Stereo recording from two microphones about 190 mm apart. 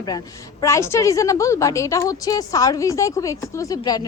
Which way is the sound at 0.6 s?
15° left (ahead or behind).